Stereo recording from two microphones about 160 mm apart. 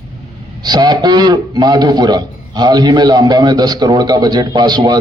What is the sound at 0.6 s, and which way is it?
A man's voice, 25° right (ahead or behind).